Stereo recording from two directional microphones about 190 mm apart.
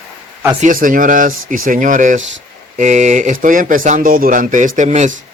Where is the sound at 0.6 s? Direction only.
45° right (ahead or behind).